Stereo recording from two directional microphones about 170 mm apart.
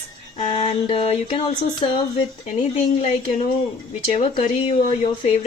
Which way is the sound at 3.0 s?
40° left (ahead or behind).